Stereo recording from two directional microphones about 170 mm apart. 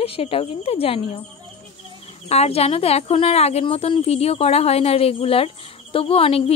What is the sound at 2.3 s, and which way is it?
A woman's voice, 35° left (ahead or behind).